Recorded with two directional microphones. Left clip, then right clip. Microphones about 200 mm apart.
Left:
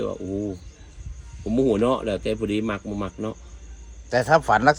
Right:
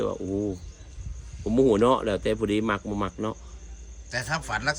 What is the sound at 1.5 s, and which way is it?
Speech, 5° right (ahead or behind).